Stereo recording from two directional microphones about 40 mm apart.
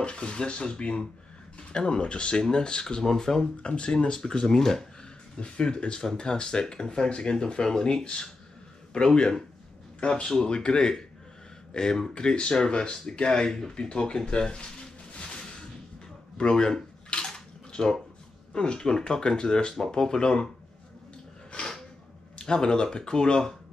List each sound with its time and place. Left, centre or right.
0.0 s speech: left
5.4 s speech: left
13.5 s speech: centre
13.7 s speech: left
16.3 s bathtub: centre
18.5 s speech: left
22.4 s speech: centre